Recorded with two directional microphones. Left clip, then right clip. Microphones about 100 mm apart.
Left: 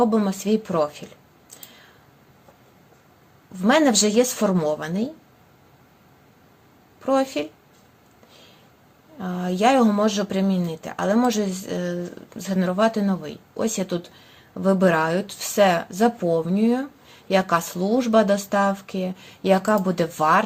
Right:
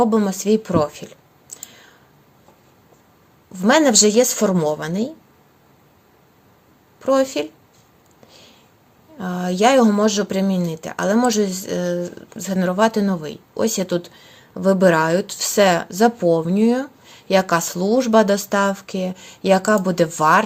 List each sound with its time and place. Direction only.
0.0 s speech: 40° right (ahead or behind)
3.5 s speech: 45° right (ahead or behind)
7.0 s speech: 45° right (ahead or behind)
9.1 s speech: 50° right (ahead or behind)